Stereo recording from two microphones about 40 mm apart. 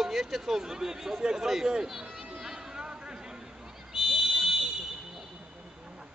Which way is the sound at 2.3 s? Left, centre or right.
Centre.